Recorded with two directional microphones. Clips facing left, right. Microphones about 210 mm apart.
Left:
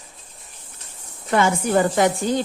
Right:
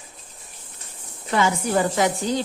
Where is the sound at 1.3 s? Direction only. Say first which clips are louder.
Left 3 dB; 50° left (ahead or behind).